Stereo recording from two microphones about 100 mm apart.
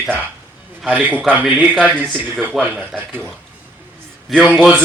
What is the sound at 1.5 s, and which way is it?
Speech, 15° right (ahead or behind).